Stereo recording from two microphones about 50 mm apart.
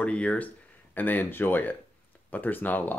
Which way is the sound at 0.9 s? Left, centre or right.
Left.